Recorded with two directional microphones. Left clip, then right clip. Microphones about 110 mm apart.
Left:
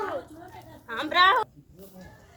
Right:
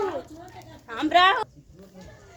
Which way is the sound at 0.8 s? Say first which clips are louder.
Right 2 dB; 40° right (ahead or behind).